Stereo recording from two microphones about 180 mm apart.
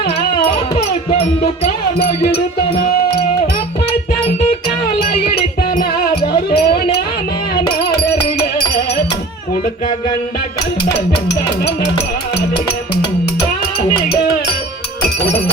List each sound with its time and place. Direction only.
6.2 s music: 60° left (ahead or behind)